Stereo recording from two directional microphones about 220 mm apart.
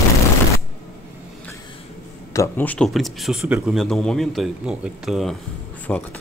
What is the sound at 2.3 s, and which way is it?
Speech, 10° left (ahead or behind).